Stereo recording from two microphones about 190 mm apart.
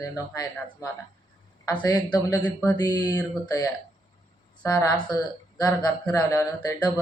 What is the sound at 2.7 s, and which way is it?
A woman's voice, 20° left (ahead or behind).